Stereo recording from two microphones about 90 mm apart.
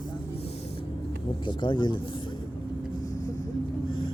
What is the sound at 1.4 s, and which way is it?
Speech, 60° left (ahead or behind).